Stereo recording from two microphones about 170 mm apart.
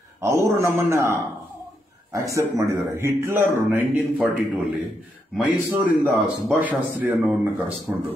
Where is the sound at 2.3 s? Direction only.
20° right (ahead or behind).